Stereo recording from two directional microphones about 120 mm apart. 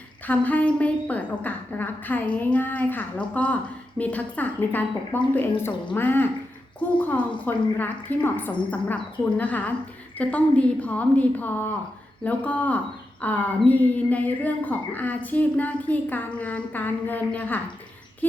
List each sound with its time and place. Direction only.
0.3 s a woman's voice: 15° left (ahead or behind)